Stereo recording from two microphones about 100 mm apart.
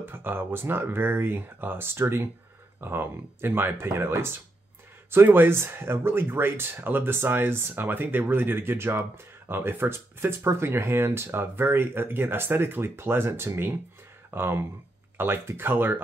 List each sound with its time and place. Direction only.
0.0 s speech: 20° right (ahead or behind)